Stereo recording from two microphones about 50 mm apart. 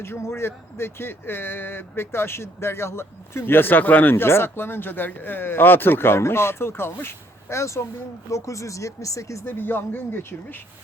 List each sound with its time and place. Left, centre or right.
0.0 s speech: left
4.1 s speech: left
6.1 s speech: left
7.5 s speech: left
8.3 s speech: left
9.5 s speech: left